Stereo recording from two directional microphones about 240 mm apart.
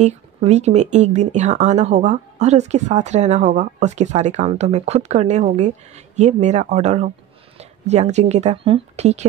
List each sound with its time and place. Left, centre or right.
0.0 s speech: right